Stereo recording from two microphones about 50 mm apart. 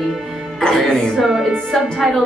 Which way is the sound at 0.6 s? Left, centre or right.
Centre.